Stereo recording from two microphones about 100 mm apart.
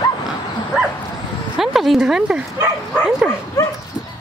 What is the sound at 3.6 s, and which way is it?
Dog, 30° left (ahead or behind).